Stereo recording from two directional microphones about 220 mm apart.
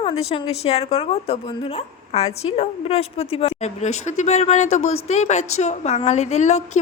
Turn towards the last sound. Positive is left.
turn(degrees=30)  # may be behind; listen again after turning